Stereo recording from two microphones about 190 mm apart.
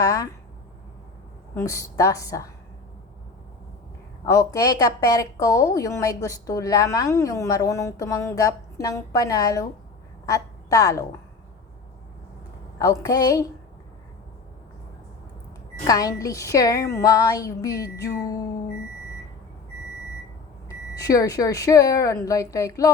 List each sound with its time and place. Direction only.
0.0 s a woman's voice: 15° left (ahead or behind)
1.5 s a woman's voice: 15° left (ahead or behind)
4.3 s a woman's voice: 15° left (ahead or behind)
12.8 s a woman's voice: 20° left (ahead or behind)
15.9 s a woman's voice: 20° left (ahead or behind)
20.7 s a woman's voice: 20° left (ahead or behind)